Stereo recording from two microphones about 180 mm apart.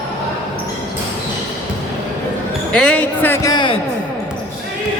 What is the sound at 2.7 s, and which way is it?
Speech, 5° left (ahead or behind).